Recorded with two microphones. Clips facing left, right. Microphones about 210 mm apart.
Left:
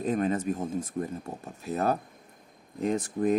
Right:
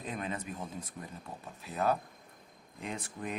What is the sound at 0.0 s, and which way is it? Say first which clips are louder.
Speech: left 12 dB; 45° left (ahead or behind).